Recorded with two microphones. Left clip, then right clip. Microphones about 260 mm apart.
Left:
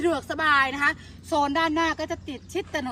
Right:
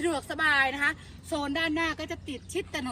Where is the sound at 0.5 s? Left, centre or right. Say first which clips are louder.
Left 6 dB; left.